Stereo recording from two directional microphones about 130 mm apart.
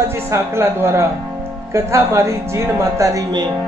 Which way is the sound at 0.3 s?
20° right (ahead or behind).